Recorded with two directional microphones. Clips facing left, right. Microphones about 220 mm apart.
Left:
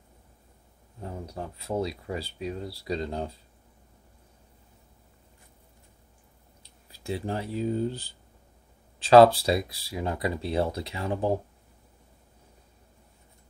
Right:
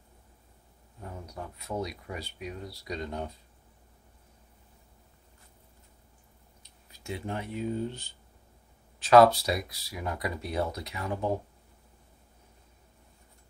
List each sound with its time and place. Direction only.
1.0 s speech: 30° left (ahead or behind)
6.6 s speech: 30° left (ahead or behind)